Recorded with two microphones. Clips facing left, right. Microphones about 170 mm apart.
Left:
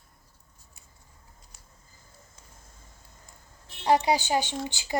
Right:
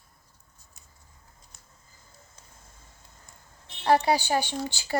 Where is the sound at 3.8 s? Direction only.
15° left (ahead or behind).